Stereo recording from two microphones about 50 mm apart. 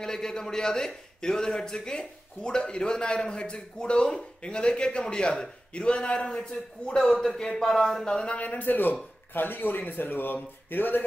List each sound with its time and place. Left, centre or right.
0.0 s a man's voice: centre
8.3 s a man's voice: left